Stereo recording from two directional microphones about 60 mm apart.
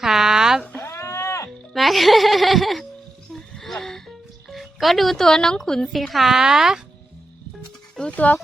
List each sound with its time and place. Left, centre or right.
0.0 s a sound: centre
0.6 s cat: left
0.9 s a sound: left
1.7 s speech: centre
3.3 s music: centre
8.1 s speech: left